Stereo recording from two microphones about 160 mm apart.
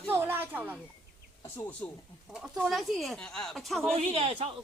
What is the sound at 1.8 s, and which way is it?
Speech, 10° left (ahead or behind).